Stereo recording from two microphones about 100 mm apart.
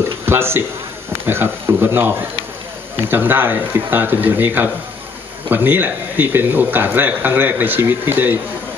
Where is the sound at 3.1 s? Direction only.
20° right (ahead or behind).